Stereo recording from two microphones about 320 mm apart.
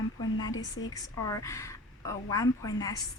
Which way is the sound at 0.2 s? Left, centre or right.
Centre.